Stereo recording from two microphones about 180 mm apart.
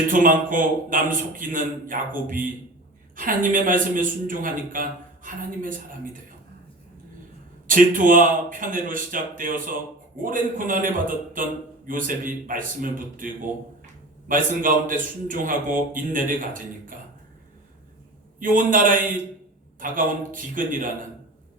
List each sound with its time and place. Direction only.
0.1 s a man's voice: 50° right (ahead or behind)
3.2 s a man's voice: 50° right (ahead or behind)
7.7 s a man's voice: 50° right (ahead or behind)
18.3 s a man's voice: 50° right (ahead or behind)